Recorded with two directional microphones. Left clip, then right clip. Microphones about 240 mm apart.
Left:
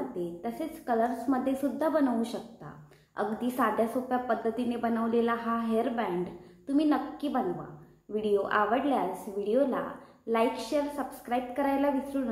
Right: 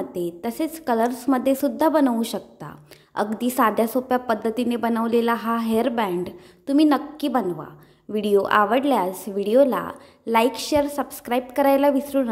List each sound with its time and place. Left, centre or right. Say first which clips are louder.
0.1 s a woman's voice: right 7 dB; right